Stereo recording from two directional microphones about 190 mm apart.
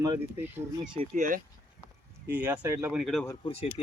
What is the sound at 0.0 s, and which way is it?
Speech, 15° right (ahead or behind).